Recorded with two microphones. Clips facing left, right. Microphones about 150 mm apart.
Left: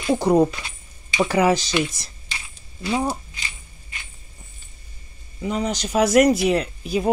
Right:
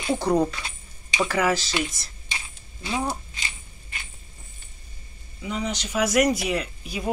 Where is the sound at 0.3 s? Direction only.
10° left (ahead or behind).